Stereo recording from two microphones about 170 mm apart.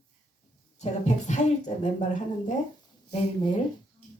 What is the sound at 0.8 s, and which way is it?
Speech, 45° left (ahead or behind).